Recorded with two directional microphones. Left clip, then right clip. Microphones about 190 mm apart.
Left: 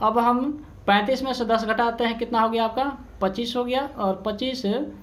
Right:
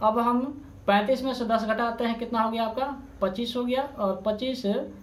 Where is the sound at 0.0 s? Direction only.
30° left (ahead or behind).